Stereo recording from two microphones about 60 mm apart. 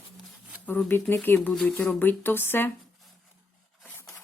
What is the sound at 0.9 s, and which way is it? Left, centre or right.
Speech, left.